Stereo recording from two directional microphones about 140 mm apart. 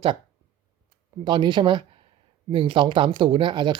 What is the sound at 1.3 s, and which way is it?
A man's voice, 35° right (ahead or behind).